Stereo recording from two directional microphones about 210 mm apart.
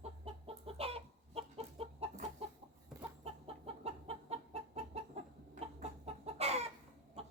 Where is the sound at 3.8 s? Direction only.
30° right (ahead or behind).